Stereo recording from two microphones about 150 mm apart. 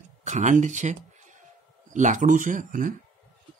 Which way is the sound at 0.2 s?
55° right (ahead or behind).